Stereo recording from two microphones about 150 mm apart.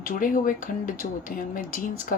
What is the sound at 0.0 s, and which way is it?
Speech, 65° left (ahead or behind).